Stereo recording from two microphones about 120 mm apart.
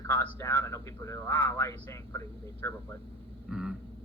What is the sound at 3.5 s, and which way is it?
Vehicle, 5° right (ahead or behind).